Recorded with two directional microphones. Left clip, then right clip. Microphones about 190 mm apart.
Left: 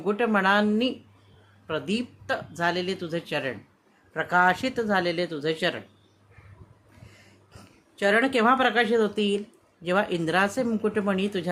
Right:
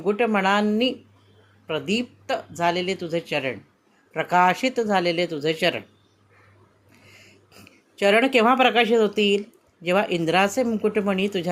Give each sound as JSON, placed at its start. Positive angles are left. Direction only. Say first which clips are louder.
{"t": 0.0, "sound": "speech", "louder": "right 2 dB", "side_deg": -10}
{"t": 7.5, "sound": "a woman's voice", "louder": "right 3 dB", "side_deg": -15}